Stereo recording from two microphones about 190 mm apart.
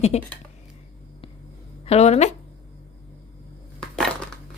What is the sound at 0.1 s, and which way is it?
Speech, 35° left (ahead or behind).